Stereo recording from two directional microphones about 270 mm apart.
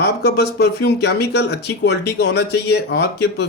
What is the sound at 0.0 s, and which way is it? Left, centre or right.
Speech, left.